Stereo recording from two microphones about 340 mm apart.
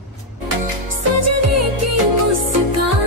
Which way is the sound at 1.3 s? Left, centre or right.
Right.